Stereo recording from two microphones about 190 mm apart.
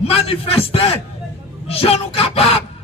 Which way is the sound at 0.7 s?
30° left (ahead or behind).